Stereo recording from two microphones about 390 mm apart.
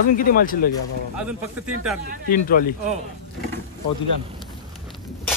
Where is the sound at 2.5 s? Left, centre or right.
Left.